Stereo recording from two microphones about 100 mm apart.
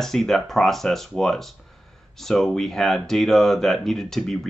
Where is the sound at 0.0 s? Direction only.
5° left (ahead or behind).